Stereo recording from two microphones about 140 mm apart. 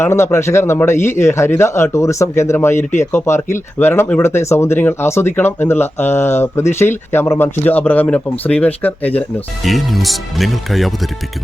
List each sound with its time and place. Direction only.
0.0 s a man's voice: 20° left (ahead or behind)
9.6 s speech: centre (ahead or behind)